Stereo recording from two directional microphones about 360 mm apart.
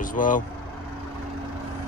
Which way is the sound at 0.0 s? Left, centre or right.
Left.